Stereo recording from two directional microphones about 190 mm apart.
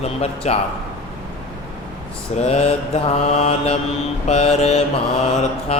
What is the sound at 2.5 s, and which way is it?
Mantra, 30° left (ahead or behind).